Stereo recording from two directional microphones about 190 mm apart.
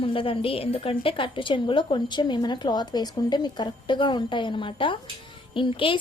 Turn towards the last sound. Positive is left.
turn(degrees=25)  # may be behind; listen again after turning